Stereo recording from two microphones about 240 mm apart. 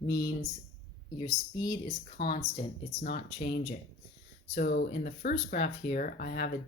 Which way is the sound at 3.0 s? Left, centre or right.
Left.